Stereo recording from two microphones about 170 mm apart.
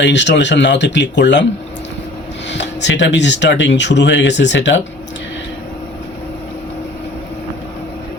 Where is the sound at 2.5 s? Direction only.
90° left.